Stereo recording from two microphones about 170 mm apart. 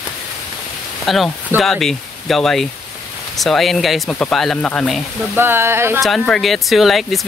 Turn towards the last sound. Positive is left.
turn(degrees=0)  # may be behind; listen again after turning